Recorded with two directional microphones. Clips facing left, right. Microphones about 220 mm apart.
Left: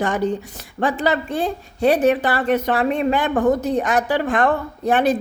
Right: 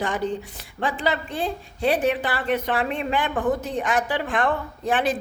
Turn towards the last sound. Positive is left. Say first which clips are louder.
# left 6 dB
turn(degrees=60)  # may be behind; listen again after turning